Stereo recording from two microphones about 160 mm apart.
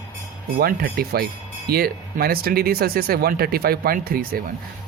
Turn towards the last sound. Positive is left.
turn(degrees=-65)  # may be behind; listen again after turning